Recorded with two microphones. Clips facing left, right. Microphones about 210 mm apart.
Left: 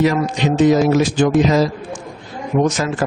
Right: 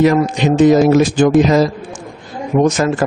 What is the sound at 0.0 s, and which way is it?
Speech, 50° right (ahead or behind).